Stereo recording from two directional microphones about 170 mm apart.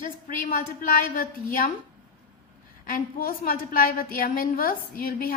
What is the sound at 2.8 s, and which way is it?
A woman's voice, 55° left (ahead or behind).